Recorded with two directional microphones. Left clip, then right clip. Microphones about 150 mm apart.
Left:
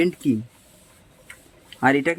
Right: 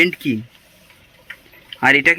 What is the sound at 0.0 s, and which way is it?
Speech, 10° left (ahead or behind).